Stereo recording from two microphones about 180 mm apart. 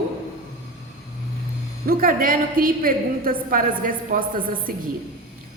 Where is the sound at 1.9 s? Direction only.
55° right (ahead or behind).